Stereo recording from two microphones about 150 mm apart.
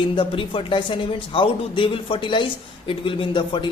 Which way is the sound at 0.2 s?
35° left (ahead or behind).